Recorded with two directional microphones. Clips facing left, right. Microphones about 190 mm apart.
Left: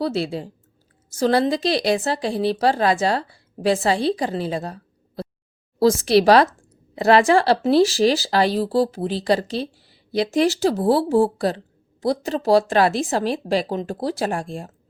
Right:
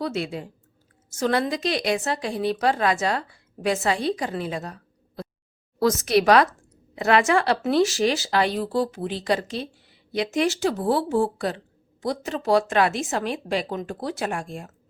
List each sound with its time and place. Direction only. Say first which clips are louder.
0.0 s speech: left 4 dB; 35° left (ahead or behind)